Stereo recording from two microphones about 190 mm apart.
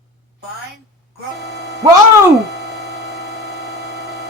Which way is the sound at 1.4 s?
60° right (ahead or behind).